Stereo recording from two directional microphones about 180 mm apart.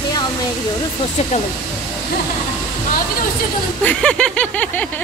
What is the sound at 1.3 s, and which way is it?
Speech, 40° left (ahead or behind).